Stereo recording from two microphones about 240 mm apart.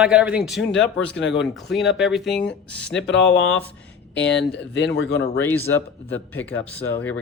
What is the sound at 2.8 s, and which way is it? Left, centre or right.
Speech, left.